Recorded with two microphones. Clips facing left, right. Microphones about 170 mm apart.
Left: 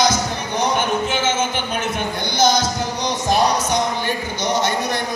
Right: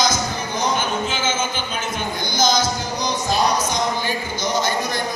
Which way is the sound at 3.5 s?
65° left (ahead or behind).